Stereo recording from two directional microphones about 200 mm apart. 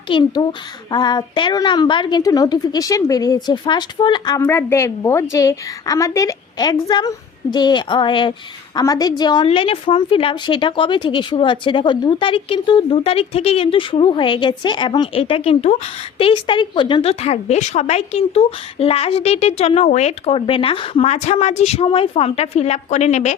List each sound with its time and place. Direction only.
0.1 s a woman's voice: 20° left (ahead or behind)
4.4 s a woman's voice: 10° left (ahead or behind); by 23.3 s 35° left (ahead or behind)